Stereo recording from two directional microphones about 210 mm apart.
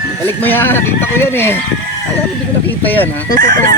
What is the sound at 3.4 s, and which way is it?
Fowl, 40° right (ahead or behind).